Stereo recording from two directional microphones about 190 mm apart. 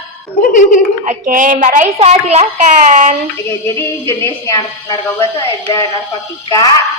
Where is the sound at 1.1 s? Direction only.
45° right (ahead or behind).